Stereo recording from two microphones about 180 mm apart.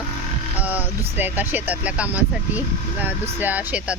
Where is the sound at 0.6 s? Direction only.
10° right (ahead or behind).